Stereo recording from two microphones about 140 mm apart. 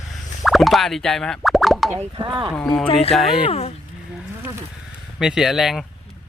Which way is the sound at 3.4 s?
45° left (ahead or behind).